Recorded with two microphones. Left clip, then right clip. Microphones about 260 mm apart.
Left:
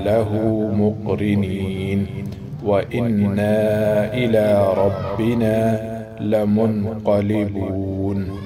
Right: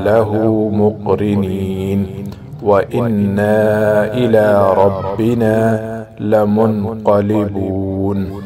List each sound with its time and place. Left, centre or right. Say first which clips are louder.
0.0 s mantra: right 6 dB; centre
6.2 s a man's voice: right 6 dB; centre